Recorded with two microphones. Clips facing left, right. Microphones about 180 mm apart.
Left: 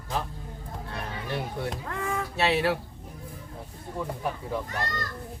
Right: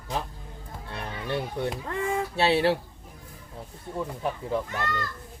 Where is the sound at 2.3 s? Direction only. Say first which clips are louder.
Right 2 dB; 30° right (ahead or behind).